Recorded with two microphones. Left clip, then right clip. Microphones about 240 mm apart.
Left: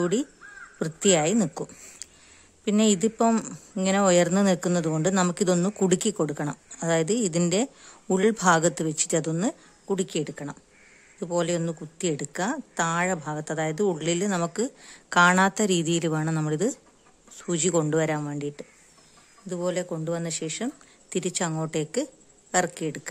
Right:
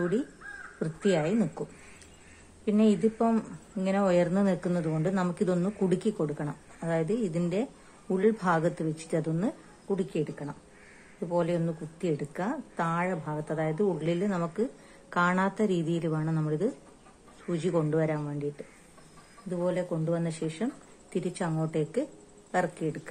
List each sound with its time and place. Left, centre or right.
0.7 s speech: left
2.6 s speech: left